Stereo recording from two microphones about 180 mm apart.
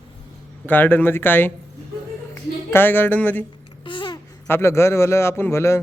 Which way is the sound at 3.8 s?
25° left (ahead or behind).